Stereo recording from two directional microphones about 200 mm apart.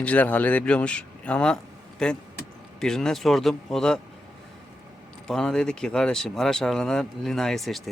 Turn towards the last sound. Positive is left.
turn(degrees=0)  # may be behind; listen again after turning